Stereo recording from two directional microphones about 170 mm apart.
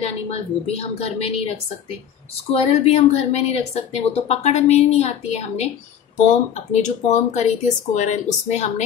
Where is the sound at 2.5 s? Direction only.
40° left (ahead or behind).